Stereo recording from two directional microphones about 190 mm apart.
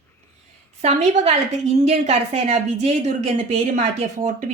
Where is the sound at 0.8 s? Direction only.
35° right (ahead or behind).